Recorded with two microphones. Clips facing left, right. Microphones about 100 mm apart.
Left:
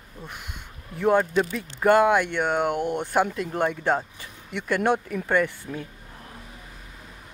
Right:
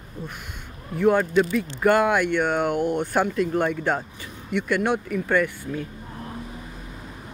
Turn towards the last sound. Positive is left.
turn(degrees=25)  # may be behind; listen again after turning